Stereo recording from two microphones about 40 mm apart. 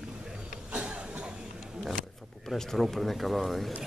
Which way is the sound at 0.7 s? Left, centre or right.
Right.